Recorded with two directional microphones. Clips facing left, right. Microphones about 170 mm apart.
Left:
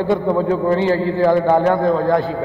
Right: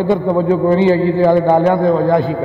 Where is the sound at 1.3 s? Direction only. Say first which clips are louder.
Right 3 dB; 20° right (ahead or behind).